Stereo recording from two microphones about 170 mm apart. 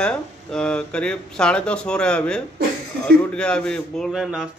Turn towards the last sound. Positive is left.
turn(degrees=-5)  # may be behind; listen again after turning